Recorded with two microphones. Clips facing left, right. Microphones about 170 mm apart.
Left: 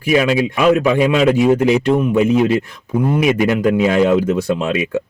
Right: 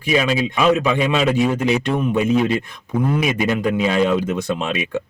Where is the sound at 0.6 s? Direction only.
10° left (ahead or behind).